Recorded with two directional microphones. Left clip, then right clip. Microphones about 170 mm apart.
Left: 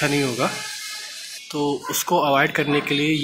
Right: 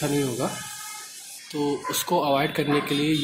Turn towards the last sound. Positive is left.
turn(degrees=-5)  # may be behind; listen again after turning